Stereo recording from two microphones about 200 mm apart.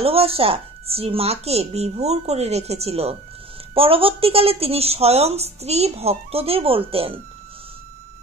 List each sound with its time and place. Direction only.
0.0 s speech: 30° right (ahead or behind)